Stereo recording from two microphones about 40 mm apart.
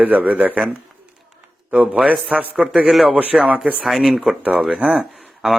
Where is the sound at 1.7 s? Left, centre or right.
Right.